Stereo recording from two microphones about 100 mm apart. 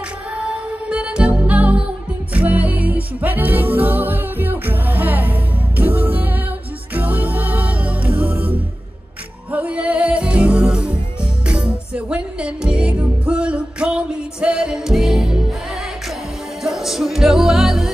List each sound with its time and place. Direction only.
0.5 s music: 10° right (ahead or behind)
16.6 s music: 5° right (ahead or behind)